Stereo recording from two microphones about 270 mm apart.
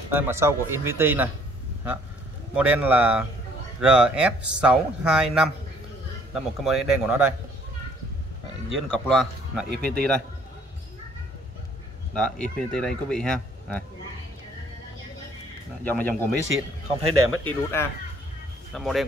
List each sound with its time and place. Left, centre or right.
0.1 s speech: centre
2.5 s speech: centre
8.7 s speech: centre
9.7 s speech: right
12.1 s speech: centre
15.8 s speech: centre
16.3 s a man's voice: right
17.3 s speech: centre